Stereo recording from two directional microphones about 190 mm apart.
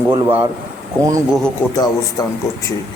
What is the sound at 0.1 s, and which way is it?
Speech, 10° right (ahead or behind).